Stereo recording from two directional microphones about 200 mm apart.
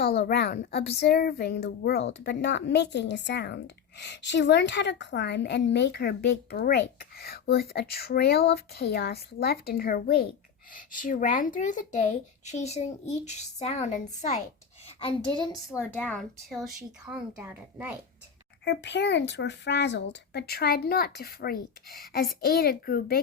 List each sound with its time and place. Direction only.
0.1 s a woman's voice: 55° left (ahead or behind); by 15.4 s 25° left (ahead or behind)
15.7 s speech: 10° left (ahead or behind); by 17.9 s 10° right (ahead or behind)
18.6 s speech: 60° left (ahead or behind)